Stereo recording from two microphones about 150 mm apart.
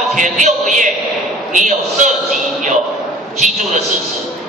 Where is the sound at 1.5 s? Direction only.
55° right (ahead or behind).